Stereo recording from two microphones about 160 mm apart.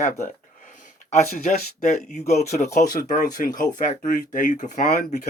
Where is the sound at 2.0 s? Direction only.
45° left (ahead or behind).